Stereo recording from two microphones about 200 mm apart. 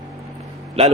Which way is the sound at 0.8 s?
30° right (ahead or behind).